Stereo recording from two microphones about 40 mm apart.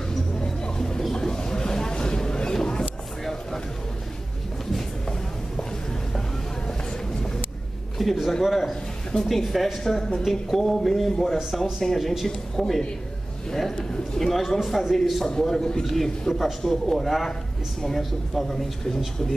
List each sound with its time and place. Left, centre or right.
0.4 s music: centre
1.1 s a sound: centre
8.0 s speech: centre
10.2 s a man's voice: centre
15.2 s a man's voice: centre